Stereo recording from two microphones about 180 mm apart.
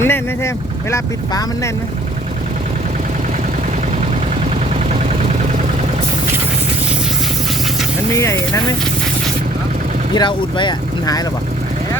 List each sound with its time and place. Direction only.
0.0 s speech: 15° left (ahead or behind)
8.1 s speech: 15° left (ahead or behind)
10.2 s speech: 25° left (ahead or behind)